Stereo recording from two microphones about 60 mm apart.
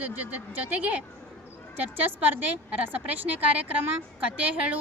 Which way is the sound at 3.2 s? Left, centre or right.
Right.